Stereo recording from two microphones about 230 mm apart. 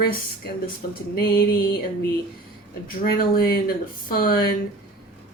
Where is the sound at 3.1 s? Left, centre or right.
Left.